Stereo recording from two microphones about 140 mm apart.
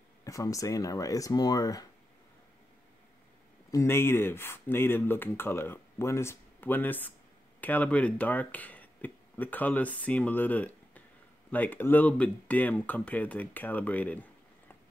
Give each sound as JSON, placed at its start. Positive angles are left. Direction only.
{"t": 0.2, "sound": "speech", "side_deg": 25}
{"t": 3.7, "sound": "speech", "side_deg": 20}